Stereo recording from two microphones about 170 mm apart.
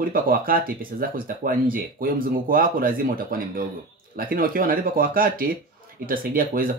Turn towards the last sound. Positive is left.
turn(degrees=-55)  # may be behind; listen again after turning